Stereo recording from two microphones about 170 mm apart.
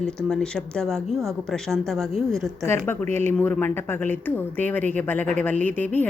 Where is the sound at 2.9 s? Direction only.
15° left (ahead or behind).